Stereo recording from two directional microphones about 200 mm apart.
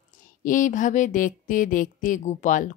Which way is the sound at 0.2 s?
40° left (ahead or behind).